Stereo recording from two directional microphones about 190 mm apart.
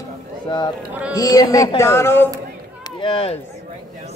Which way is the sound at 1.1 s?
20° left (ahead or behind).